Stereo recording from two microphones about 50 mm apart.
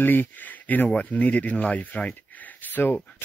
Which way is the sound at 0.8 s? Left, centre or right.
Left.